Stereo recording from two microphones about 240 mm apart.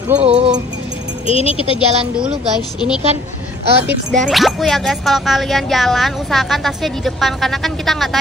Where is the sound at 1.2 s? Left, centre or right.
Left.